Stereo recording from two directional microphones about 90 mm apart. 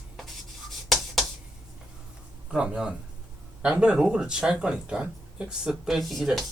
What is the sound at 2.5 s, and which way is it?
Speech, 10° right (ahead or behind).